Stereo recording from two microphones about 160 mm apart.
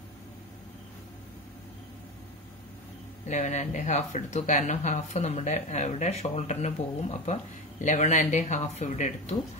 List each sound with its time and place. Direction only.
3.3 s speech: 50° left (ahead or behind)